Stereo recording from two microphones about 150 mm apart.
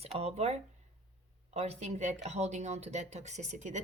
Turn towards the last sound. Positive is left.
turn(degrees=-50)  # may be behind; listen again after turning